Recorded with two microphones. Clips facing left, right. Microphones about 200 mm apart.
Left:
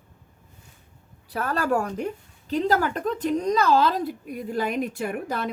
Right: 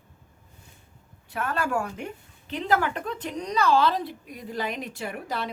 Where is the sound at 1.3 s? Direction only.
35° left (ahead or behind).